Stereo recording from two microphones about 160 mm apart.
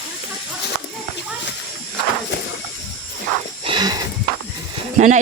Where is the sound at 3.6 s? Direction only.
30° right (ahead or behind).